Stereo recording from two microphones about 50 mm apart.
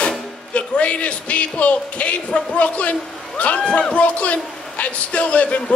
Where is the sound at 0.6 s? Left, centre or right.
Left.